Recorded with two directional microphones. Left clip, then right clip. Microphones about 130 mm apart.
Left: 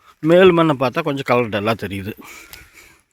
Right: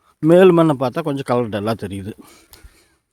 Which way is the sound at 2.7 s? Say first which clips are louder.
Left 10 dB; 25° right (ahead or behind).